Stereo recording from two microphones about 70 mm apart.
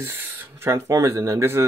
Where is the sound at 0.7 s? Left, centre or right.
Right.